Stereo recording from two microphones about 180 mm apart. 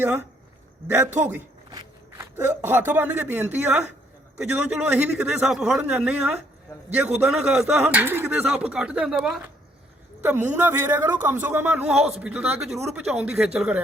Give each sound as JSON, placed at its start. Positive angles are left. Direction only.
{"t": 0.0, "sound": "a man's voice", "side_deg": -10}
{"t": 1.7, "sound": "walk", "side_deg": -20}
{"t": 2.3, "sound": "a man's voice", "side_deg": -10}